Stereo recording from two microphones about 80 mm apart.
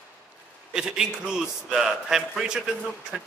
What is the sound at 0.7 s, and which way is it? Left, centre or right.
A man's voice, centre.